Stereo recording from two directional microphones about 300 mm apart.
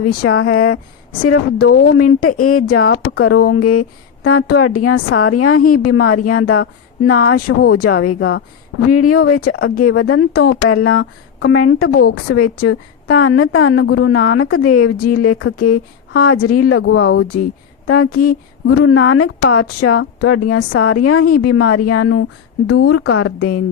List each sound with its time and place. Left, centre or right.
0.0 s a woman's voice: left
3.3 s speech: left
3.6 s a woman's voice: left